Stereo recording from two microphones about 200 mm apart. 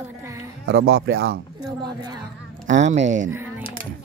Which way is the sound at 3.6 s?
25° left (ahead or behind).